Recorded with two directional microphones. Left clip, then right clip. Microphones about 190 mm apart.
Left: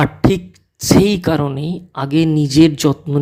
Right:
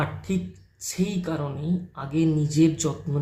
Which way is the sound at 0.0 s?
50° left (ahead or behind).